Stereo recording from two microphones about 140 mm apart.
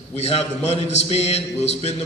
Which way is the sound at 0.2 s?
50° left (ahead or behind).